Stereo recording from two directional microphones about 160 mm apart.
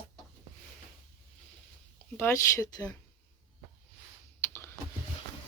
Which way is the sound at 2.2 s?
20° left (ahead or behind).